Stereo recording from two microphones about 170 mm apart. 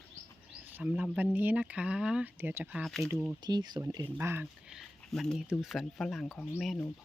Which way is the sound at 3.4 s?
25° right (ahead or behind).